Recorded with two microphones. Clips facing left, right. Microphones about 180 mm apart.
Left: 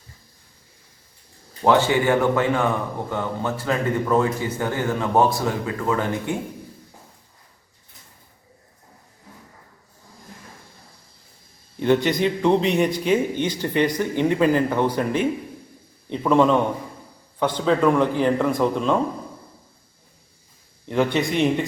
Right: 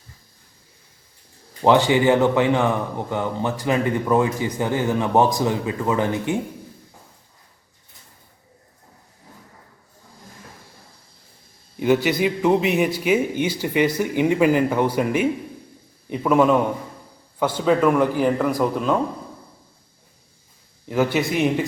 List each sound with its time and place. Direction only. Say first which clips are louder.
1.6 s a man's voice: right 2 dB; 15° right (ahead or behind)
11.8 s a man's voice: even; 5° right (ahead or behind)
20.8 s a man's voice: even; 5° right (ahead or behind)